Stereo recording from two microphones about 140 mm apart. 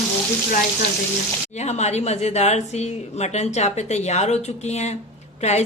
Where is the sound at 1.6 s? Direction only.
50° left (ahead or behind).